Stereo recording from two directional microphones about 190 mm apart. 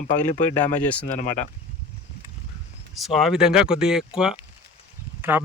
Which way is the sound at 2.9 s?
Centre (ahead or behind).